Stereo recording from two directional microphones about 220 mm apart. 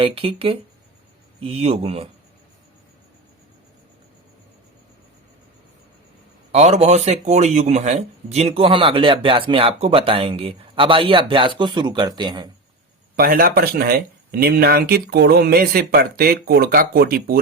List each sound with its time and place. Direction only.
0.0 s speech: 25° right (ahead or behind)
6.5 s speech: 30° right (ahead or behind)
13.1 s speech: 40° right (ahead or behind)